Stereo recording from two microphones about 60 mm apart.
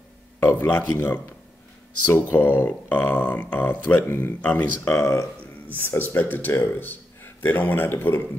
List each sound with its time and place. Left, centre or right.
0.4 s speech: left
2.3 s speech: left
4.4 s speech: left
4.9 s speech: left
5.7 s speech: left